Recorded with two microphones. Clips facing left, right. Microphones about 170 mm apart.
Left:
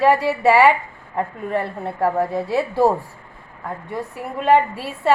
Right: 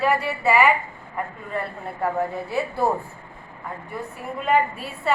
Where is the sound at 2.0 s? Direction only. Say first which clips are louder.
Left 5 dB; 90° left.